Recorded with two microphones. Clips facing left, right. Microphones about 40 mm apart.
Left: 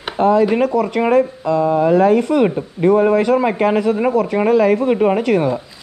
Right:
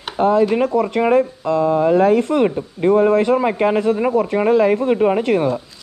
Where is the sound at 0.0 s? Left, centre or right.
Centre.